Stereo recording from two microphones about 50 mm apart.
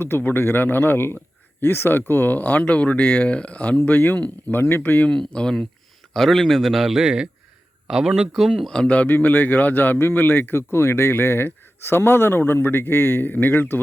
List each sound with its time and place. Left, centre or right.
0.0 s speech: left
3.8 s speech: left
4.5 s speech: left
5.0 s speech: centre
6.1 s a man's voice: centre
8.6 s speech: centre
9.0 s speech: left